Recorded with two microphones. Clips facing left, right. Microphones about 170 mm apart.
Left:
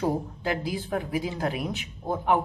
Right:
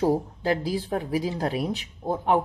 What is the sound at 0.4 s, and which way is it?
Speech, 35° right (ahead or behind).